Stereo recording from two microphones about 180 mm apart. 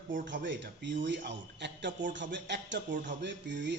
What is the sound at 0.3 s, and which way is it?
A man's voice, 80° right.